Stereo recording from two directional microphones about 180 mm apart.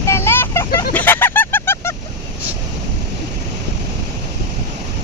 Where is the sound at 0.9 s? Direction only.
10° left (ahead or behind).